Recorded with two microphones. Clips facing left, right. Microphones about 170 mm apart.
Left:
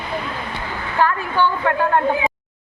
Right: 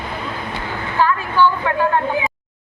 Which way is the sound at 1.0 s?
55° left (ahead or behind).